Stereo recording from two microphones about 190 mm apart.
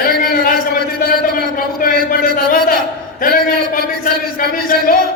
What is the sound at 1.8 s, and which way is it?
Speech, 45° left (ahead or behind).